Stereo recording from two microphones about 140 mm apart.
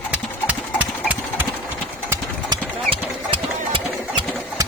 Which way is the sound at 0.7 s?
10° right (ahead or behind).